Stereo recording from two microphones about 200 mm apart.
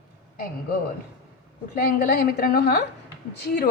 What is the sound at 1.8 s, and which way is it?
A woman's voice, 50° left (ahead or behind).